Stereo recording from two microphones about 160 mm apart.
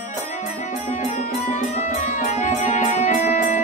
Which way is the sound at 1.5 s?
50° left (ahead or behind).